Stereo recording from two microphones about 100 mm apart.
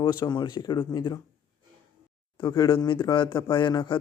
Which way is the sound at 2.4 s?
45° left (ahead or behind).